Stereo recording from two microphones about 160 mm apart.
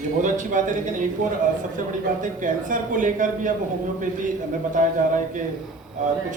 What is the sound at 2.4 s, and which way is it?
Speech, 55° right (ahead or behind).